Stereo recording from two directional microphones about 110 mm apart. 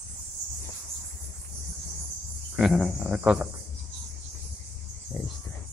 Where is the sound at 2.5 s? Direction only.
5° right (ahead or behind).